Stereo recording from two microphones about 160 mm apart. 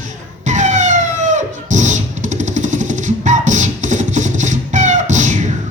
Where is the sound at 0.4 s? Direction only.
50° right (ahead or behind).